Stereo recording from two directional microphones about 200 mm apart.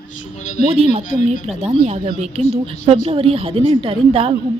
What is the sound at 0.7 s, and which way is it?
Speech, 30° right (ahead or behind).